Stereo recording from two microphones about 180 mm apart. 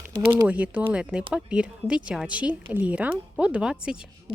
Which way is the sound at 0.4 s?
10° right (ahead or behind).